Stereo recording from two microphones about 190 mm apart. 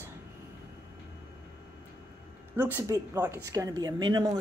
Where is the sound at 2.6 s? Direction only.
10° right (ahead or behind).